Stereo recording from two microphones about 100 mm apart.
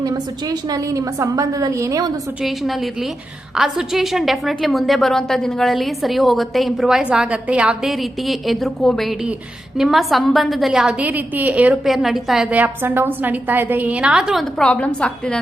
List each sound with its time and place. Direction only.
0.7 s a woman's voice: 35° right (ahead or behind)
2.4 s a woman's voice: centre (ahead or behind)
11.9 s a woman's voice: centre (ahead or behind)
12.5 s a woman's voice: 15° right (ahead or behind)
14.6 s a woman's voice: 10° left (ahead or behind)